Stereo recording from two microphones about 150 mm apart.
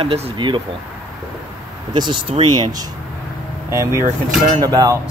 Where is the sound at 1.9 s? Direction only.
30° right (ahead or behind).